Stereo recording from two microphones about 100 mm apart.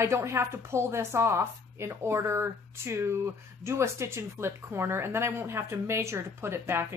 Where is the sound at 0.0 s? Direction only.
30° right (ahead or behind).